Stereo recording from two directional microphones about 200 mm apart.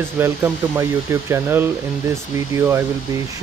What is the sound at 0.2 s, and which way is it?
Speech, 10° right (ahead or behind).